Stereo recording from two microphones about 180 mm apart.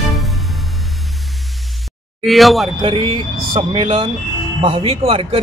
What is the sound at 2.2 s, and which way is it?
Speech, centre (ahead or behind).